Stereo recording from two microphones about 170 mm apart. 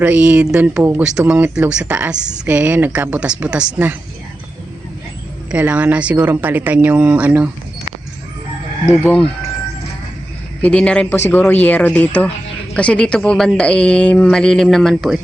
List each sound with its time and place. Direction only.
0.0 s speech: 5° right (ahead or behind)
5.5 s speech: 10° right (ahead or behind)
9.0 s a woman's voice: 5° left (ahead or behind)
10.6 s a woman's voice: 5° left (ahead or behind)